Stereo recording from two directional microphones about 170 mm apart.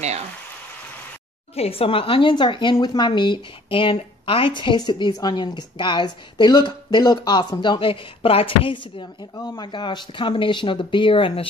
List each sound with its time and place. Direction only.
1.5 s a woman's voice: 35° left (ahead or behind)